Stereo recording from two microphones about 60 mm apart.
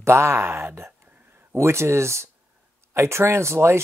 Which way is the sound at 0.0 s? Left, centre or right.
Right.